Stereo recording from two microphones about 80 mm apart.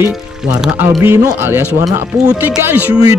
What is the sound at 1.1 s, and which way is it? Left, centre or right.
Speech, right.